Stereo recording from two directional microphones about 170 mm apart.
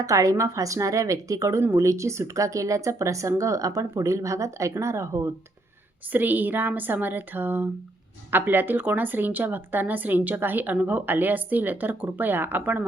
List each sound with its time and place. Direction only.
0.0 s a woman's voice: 20° right (ahead or behind)